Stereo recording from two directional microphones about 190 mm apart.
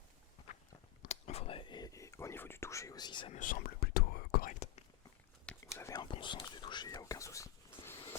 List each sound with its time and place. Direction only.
1.0 s whispering: 35° left (ahead or behind)
3.3 s whispering: 45° left (ahead or behind)
5.5 s whispering: 15° left (ahead or behind)